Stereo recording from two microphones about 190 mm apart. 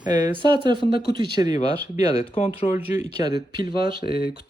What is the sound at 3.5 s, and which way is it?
Speech, 25° right (ahead or behind).